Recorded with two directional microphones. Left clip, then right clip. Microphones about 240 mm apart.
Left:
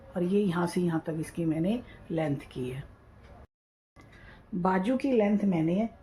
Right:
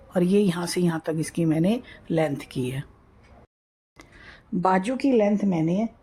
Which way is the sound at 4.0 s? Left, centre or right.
Right.